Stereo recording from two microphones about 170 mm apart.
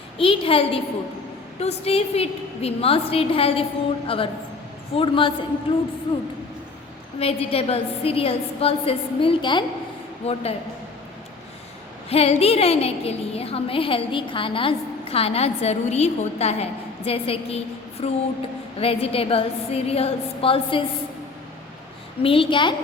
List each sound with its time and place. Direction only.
0.2 s a woman's voice: 30° left (ahead or behind)
7.2 s a woman's voice: 35° left (ahead or behind)
10.2 s a woman's voice: 40° left (ahead or behind)
12.0 s a woman's voice: 35° left (ahead or behind)
22.2 s a woman's voice: 30° left (ahead or behind)